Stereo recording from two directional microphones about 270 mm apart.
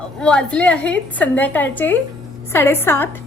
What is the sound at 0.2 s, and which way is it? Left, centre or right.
A woman's voice, centre.